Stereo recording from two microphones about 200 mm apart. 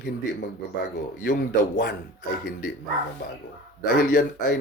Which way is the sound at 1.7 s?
55° left (ahead or behind).